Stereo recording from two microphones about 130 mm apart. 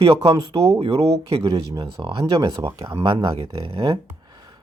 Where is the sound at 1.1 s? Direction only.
50° right (ahead or behind).